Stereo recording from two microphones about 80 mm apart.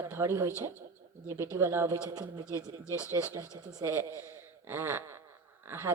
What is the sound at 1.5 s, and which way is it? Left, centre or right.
Speech, right.